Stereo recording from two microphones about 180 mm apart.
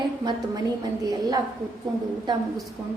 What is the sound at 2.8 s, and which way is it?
Speech, 15° right (ahead or behind).